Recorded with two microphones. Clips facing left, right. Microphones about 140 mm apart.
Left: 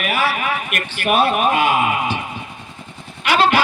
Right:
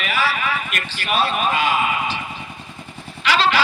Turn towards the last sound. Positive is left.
turn(degrees=55)  # may be behind; listen again after turning